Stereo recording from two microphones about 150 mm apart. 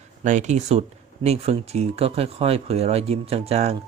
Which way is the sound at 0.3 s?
55° right (ahead or behind).